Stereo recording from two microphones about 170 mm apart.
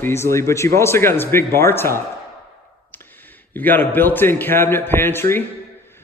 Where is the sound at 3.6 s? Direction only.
10° left (ahead or behind).